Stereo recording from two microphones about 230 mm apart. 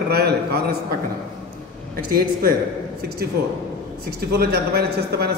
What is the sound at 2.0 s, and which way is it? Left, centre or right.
Speech, right.